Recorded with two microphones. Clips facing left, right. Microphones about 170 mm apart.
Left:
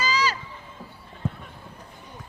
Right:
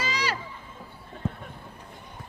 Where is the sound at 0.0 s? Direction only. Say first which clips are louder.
Left 4 dB; 65° right (ahead or behind).